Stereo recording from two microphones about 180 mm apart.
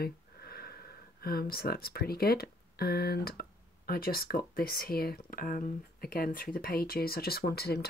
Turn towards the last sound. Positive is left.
turn(degrees=60)  # may be behind; listen again after turning